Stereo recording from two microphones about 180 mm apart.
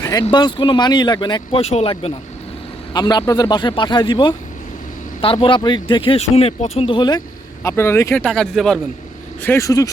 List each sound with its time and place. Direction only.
0.0 s speech: 20° left (ahead or behind)
7.6 s speech: 15° left (ahead or behind)
8.3 s speech: centre (ahead or behind)
9.4 s speech: 15° left (ahead or behind)